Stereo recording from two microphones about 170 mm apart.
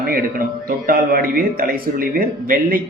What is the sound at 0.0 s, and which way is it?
A man's voice, 55° right (ahead or behind).